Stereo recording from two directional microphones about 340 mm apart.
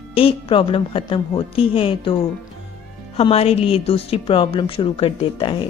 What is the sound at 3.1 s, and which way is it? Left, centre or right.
A woman's voice, centre.